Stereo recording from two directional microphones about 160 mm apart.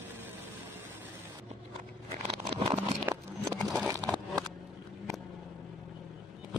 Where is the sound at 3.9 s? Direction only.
25° right (ahead or behind).